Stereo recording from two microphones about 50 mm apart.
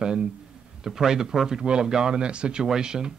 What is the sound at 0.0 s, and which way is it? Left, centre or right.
Speech, centre.